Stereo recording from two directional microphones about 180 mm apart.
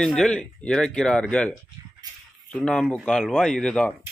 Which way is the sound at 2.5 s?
5° left (ahead or behind).